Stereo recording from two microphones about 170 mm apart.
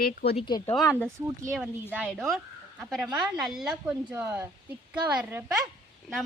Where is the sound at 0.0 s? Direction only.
65° left (ahead or behind).